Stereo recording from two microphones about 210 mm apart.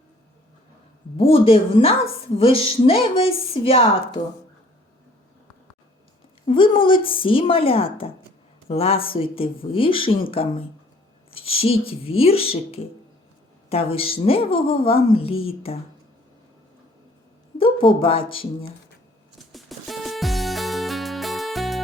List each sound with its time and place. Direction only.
1.1 s a woman's voice: 25° left (ahead or behind)
6.4 s a woman's voice: 25° left (ahead or behind)
17.6 s a woman's voice: 25° left (ahead or behind)
19.4 s music: centre (ahead or behind)